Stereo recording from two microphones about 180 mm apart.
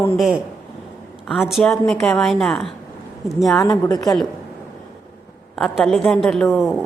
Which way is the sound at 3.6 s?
20° left (ahead or behind).